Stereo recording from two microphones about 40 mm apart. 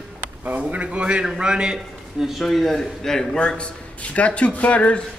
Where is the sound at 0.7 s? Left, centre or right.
Right.